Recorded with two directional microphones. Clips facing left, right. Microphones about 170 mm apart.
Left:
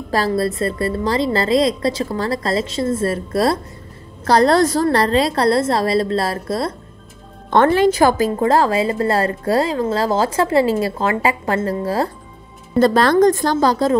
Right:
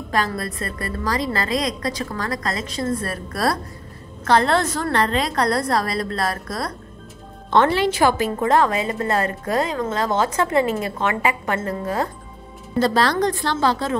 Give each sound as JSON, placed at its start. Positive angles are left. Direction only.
{"t": 0.3, "sound": "a woman's voice", "side_deg": 25}
{"t": 4.2, "sound": "a woman's voice", "side_deg": 35}
{"t": 7.5, "sound": "a woman's voice", "side_deg": 50}
{"t": 12.7, "sound": "a woman's voice", "side_deg": 50}